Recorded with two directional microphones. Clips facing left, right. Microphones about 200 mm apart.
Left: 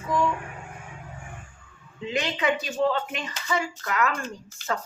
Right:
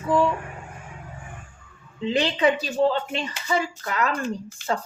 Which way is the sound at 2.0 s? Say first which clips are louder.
Right 6 dB; 30° right (ahead or behind).